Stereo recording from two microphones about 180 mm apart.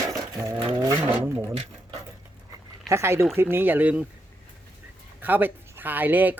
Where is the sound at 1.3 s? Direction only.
35° right (ahead or behind).